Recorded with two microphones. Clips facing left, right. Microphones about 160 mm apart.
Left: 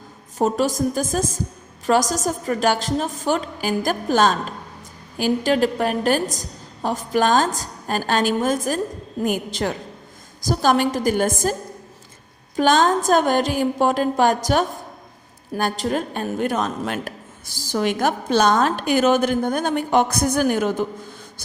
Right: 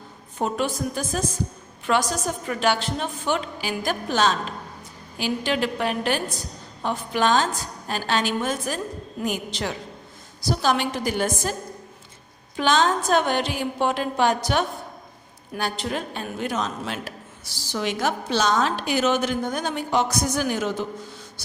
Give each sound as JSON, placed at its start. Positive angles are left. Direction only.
{"t": 0.3, "sound": "a woman's voice", "side_deg": 40}
{"t": 12.5, "sound": "a woman's voice", "side_deg": 45}